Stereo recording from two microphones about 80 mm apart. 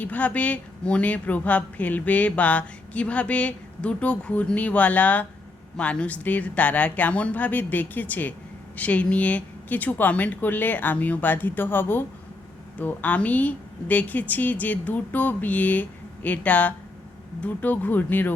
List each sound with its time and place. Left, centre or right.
0.0 s a woman's voice: centre